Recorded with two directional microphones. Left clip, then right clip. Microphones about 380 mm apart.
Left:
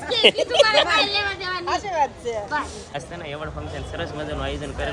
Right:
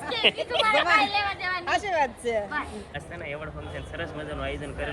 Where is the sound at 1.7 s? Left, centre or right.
Right.